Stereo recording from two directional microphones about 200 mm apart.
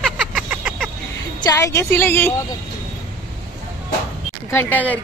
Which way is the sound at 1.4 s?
15° left (ahead or behind).